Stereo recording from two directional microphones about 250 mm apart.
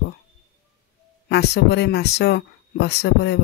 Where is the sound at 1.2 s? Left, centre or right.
Left.